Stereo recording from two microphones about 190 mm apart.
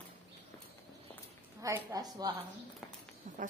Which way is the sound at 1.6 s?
15° right (ahead or behind).